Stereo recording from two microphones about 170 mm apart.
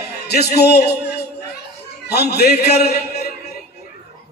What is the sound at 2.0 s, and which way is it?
Speech, 75° left (ahead or behind).